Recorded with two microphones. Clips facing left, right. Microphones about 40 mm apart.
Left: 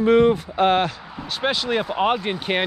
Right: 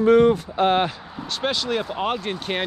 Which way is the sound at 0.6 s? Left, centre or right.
Left.